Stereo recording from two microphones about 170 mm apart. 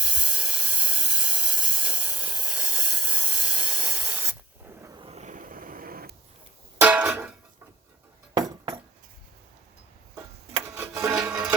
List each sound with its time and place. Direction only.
0.0 s steam: 5° right (ahead or behind)
4.8 s a sound: 20° right (ahead or behind)
5.0 s a sound: 40° right (ahead or behind); by 6.1 s 60° right (ahead or behind)
6.7 s music: 5° right (ahead or behind)
10.7 s music: 15° right (ahead or behind)
11.1 s music: 5° right (ahead or behind)